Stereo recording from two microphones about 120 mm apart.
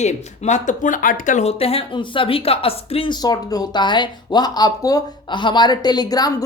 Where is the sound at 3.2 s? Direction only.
30° left (ahead or behind).